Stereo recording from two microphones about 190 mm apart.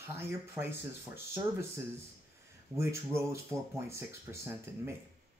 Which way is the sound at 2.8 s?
15° right (ahead or behind).